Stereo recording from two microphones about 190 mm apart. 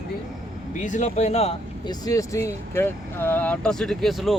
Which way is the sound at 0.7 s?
40° left (ahead or behind).